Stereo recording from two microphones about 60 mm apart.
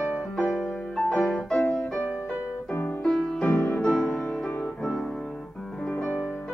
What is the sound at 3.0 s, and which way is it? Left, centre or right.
Music, centre.